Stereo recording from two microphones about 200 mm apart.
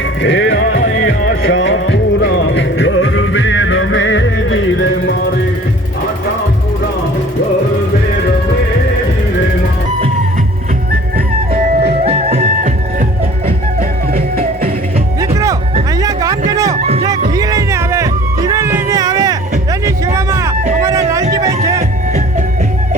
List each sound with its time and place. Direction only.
0.2 s music: 60° left (ahead or behind)
1.5 s music: 70° left (ahead or behind)
11.9 s music: 30° right (ahead or behind)
14.1 s music: 50° right (ahead or behind)
16.0 s music: 15° right (ahead or behind)
16.8 s music: 30° right (ahead or behind)
17.1 s music: 15° right (ahead or behind)
19.8 s a sound: 15° right (ahead or behind)
20.8 s music: 15° right (ahead or behind)